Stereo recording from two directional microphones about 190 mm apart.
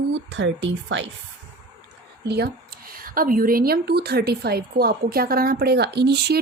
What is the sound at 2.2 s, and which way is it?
A woman's voice, 60° right (ahead or behind).